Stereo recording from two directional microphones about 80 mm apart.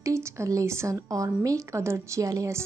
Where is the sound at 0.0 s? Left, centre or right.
Right.